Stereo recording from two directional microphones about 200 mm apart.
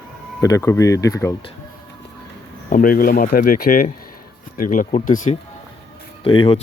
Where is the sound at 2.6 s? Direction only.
45° left (ahead or behind).